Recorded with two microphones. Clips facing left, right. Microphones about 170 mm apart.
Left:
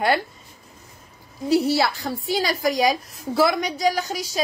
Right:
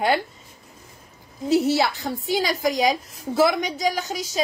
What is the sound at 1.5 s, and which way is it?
A woman's voice, 20° right (ahead or behind).